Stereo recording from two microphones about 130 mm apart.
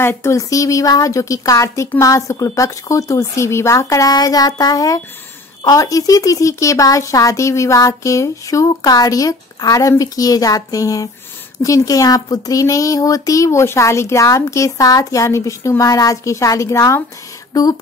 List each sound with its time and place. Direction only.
0.0 s speech: 20° left (ahead or behind)